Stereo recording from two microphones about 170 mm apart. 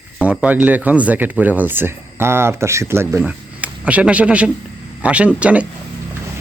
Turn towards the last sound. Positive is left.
turn(degrees=-10)  # may be behind; listen again after turning